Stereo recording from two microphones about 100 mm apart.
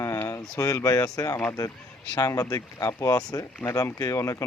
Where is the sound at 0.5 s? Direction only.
35° left (ahead or behind).